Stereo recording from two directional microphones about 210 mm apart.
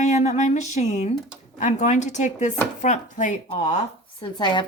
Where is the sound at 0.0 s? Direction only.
35° left (ahead or behind).